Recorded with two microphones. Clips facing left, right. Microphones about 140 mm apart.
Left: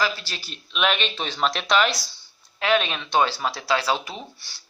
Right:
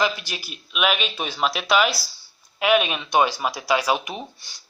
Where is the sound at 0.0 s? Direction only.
15° right (ahead or behind).